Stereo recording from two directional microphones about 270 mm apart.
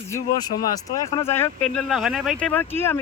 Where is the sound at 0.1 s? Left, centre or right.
Centre.